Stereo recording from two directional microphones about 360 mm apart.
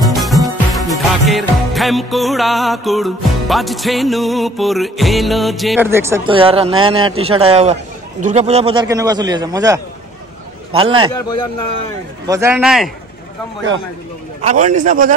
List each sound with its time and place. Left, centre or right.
0.1 s music: centre
10.8 s a man's voice: centre
12.3 s music: centre
14.4 s a man's voice: centre